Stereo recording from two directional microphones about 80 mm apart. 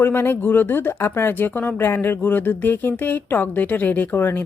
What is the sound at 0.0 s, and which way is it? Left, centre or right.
Speech, left.